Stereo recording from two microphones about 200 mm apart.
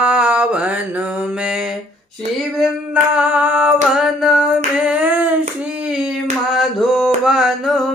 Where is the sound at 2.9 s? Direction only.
5° right (ahead or behind).